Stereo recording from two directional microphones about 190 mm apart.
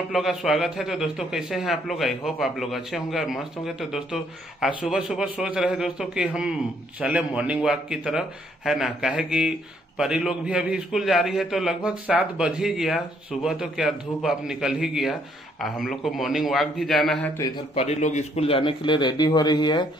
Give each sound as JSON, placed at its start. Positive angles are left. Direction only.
{"t": 0.1, "sound": "a man's voice", "side_deg": 0}
{"t": 17.7, "sound": "speech", "side_deg": 35}